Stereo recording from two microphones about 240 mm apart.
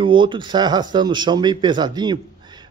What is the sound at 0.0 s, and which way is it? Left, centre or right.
Speech, centre.